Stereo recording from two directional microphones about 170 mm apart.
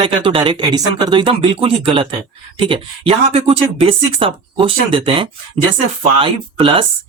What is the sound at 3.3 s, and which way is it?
Speech, 35° right (ahead or behind).